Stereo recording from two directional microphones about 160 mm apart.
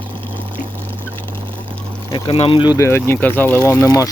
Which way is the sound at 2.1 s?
35° left (ahead or behind).